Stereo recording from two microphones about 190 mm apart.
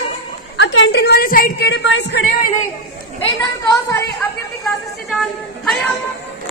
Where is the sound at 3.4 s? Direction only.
15° left (ahead or behind).